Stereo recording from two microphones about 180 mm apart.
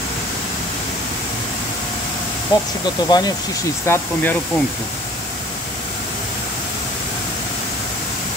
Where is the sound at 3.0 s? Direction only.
20° left (ahead or behind).